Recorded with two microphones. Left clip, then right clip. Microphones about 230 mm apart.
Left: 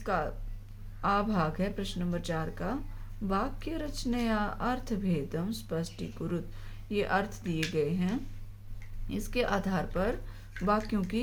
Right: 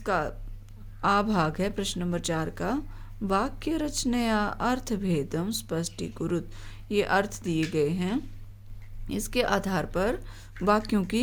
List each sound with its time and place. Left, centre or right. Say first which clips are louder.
0.0 s speech: right 4 dB; right